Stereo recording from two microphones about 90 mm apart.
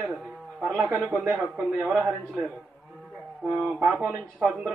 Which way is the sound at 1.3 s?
15° right (ahead or behind).